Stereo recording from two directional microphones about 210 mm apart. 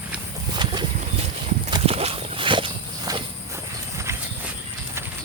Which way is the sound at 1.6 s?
25° right (ahead or behind).